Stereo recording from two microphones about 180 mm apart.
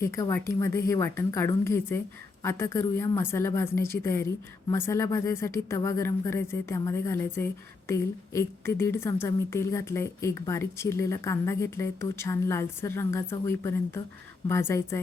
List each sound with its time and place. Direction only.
0.0 s a woman's voice: 15° left (ahead or behind)